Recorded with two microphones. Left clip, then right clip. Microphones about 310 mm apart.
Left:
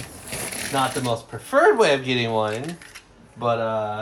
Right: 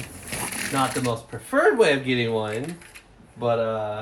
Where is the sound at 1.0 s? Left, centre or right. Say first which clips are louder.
Left 2 dB; centre.